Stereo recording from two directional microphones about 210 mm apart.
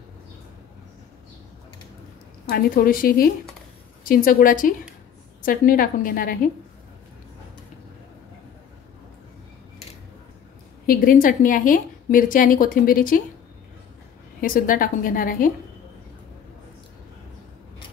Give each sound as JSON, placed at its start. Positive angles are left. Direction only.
{"t": 2.4, "sound": "a woman's voice", "side_deg": 45}
{"t": 10.9, "sound": "a woman's voice", "side_deg": 40}
{"t": 14.4, "sound": "a woman's voice", "side_deg": 40}